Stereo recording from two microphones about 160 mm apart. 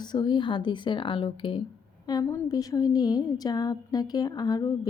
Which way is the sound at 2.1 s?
20° left (ahead or behind).